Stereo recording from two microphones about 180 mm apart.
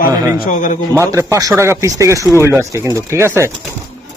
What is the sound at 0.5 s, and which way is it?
Speech, 45° left (ahead or behind).